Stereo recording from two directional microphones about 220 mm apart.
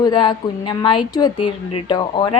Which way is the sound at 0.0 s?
20° left (ahead or behind).